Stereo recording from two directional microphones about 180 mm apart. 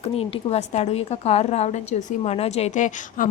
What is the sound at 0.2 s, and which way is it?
A woman's voice, 35° left (ahead or behind).